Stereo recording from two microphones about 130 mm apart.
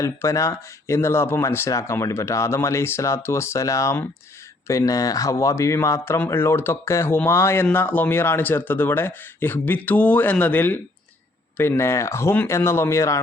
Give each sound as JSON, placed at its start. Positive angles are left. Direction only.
{"t": 0.0, "sound": "speech", "side_deg": 20}